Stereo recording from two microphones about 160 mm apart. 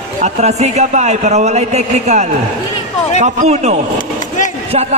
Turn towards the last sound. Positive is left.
turn(degrees=-45)  # may be behind; listen again after turning